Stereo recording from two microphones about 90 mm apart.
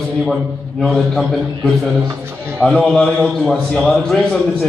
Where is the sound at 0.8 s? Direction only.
5° left (ahead or behind).